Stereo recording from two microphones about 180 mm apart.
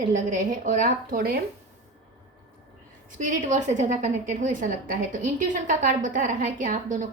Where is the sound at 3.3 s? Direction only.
45° right (ahead or behind).